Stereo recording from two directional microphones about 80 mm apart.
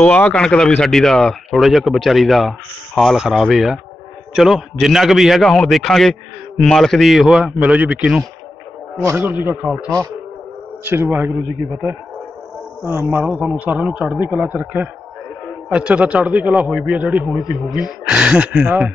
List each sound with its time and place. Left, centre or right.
0.0 s speech: centre
7.6 s a man's voice: centre
10.8 s a man's voice: right
12.8 s a man's voice: right
17.3 s speech: centre